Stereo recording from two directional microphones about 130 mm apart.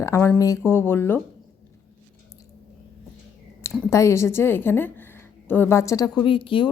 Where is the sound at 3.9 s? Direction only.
20° left (ahead or behind).